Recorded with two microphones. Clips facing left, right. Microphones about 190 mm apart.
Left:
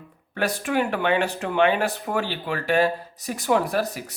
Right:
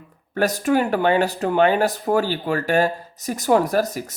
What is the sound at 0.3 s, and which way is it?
Speech, 40° right (ahead or behind).